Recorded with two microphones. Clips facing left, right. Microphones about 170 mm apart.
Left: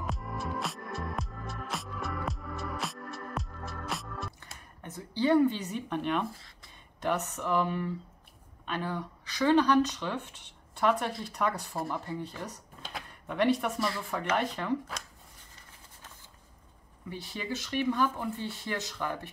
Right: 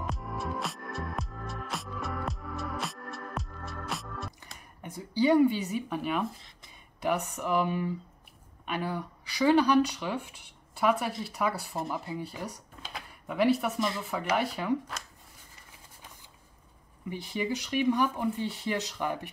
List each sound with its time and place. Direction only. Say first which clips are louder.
0.0 s music: right 1 dB; centre (ahead or behind)
4.8 s speech: right 2 dB; 15° right (ahead or behind)
6.3 s speech: even; 20° right (ahead or behind)
12.9 s a sound: right 1 dB; 5° right (ahead or behind)
13.7 s speech: right 1 dB; 20° right (ahead or behind)
14.1 s speech: right 1 dB; 10° right (ahead or behind)
17.1 s speech: right 5 dB; 15° right (ahead or behind)